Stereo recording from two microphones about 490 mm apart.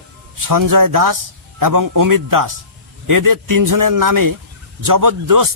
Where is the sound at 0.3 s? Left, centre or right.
Right.